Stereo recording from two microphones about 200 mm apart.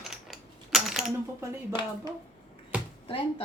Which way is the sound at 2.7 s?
5° right (ahead or behind).